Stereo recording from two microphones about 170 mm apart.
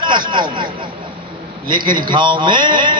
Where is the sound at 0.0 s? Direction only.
30° right (ahead or behind).